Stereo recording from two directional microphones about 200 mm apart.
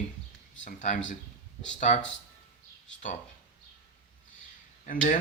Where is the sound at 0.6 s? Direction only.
40° left (ahead or behind).